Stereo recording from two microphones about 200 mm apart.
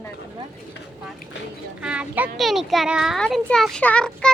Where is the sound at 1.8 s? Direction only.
5° right (ahead or behind).